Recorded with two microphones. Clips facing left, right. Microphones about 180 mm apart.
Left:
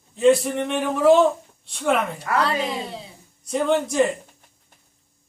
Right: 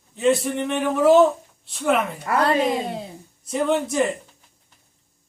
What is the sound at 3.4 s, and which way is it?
Speech, centre (ahead or behind).